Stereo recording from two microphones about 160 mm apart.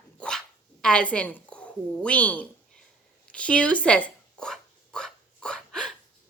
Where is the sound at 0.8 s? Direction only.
5° left (ahead or behind).